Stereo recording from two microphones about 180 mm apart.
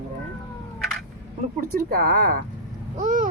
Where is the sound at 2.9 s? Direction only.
45° right (ahead or behind).